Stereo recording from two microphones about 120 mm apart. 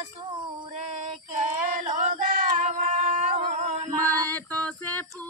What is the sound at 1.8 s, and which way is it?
Singing, 90° right.